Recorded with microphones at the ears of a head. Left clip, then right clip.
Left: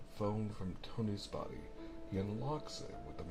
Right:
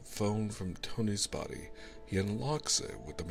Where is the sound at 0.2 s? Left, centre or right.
Right.